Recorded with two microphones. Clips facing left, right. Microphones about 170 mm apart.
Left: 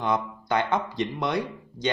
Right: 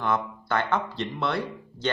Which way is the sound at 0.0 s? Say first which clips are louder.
Left 1 dB; 15° left (ahead or behind).